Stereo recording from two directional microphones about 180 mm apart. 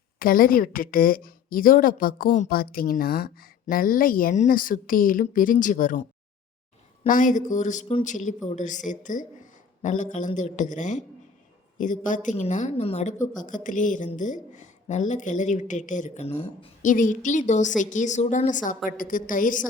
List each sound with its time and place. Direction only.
0.2 s speech: 50° left (ahead or behind)
7.1 s speech: 45° left (ahead or behind)